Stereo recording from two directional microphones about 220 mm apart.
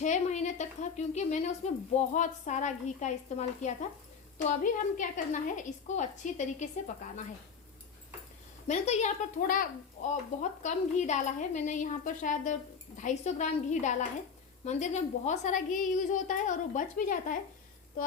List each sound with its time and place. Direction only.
0.0 s a woman's voice: 30° left (ahead or behind)
8.6 s a woman's voice: 30° left (ahead or behind)